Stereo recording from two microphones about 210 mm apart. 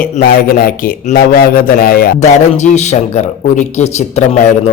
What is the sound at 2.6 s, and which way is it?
Speech, 35° left (ahead or behind).